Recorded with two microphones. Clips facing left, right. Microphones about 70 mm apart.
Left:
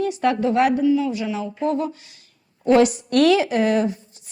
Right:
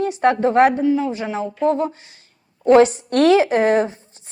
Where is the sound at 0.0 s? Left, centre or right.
Right.